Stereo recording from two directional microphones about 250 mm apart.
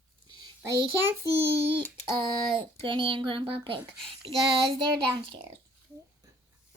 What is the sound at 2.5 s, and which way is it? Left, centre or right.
A child's voice, centre.